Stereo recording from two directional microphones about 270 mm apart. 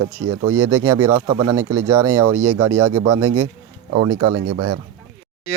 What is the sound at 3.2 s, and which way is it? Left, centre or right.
Speech, right.